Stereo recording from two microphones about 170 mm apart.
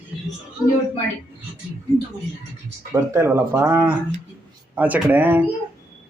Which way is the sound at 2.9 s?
15° right (ahead or behind).